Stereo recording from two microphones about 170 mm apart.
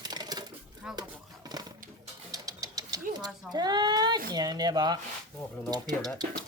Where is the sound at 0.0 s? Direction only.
25° right (ahead or behind).